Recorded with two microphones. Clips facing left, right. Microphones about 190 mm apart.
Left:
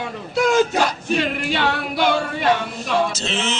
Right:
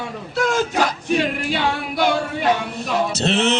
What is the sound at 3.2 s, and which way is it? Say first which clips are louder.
Music: right 6 dB; 60° right (ahead or behind).